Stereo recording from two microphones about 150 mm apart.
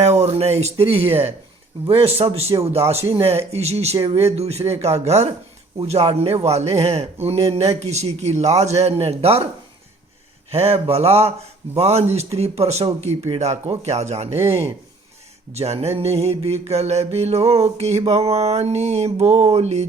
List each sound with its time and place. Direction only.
0.0 s a sound: 45° right (ahead or behind)
1.9 s a man's voice: 40° right (ahead or behind)
3.2 s mantra: 45° right (ahead or behind)
10.5 s mantra: 40° right (ahead or behind)